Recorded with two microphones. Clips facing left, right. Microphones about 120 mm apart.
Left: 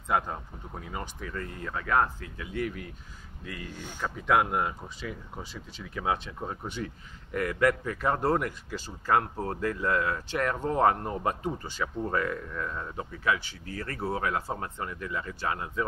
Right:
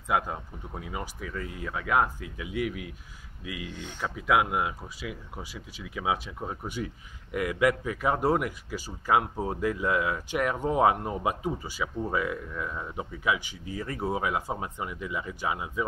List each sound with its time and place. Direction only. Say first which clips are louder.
0.1 s speech: right 1 dB; 5° right (ahead or behind)